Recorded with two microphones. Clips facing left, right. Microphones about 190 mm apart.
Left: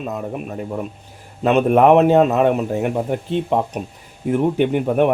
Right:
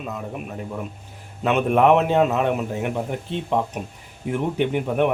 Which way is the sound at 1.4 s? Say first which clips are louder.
Left 4 dB; 40° left (ahead or behind).